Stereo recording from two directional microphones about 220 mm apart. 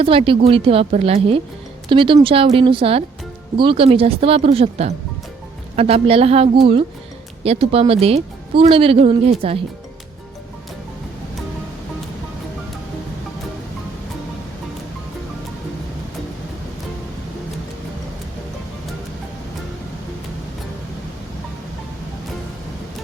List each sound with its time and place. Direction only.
0.0 s speech: 25° right (ahead or behind)